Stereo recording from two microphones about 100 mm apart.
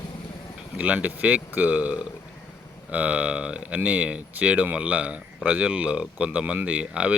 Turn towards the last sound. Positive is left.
turn(degrees=-15)  # may be behind; listen again after turning